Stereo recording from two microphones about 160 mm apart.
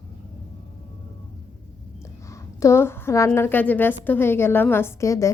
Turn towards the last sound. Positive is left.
turn(degrees=20)  # may be behind; listen again after turning